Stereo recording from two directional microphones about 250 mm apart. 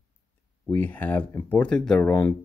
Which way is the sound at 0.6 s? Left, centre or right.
Centre.